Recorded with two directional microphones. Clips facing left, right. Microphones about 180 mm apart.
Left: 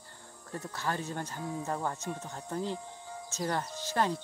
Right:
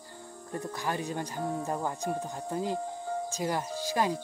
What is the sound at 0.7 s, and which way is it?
Speech, 15° right (ahead or behind).